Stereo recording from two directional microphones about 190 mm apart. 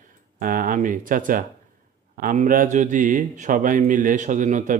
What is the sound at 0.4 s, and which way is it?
Speech, 50° right (ahead or behind).